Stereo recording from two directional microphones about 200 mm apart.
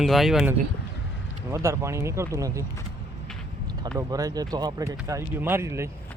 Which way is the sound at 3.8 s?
15° right (ahead or behind).